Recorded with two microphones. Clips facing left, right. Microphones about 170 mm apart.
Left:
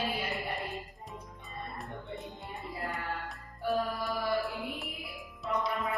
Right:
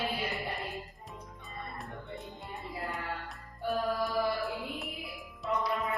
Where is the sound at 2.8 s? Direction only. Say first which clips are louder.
Left 2 dB; centre (ahead or behind).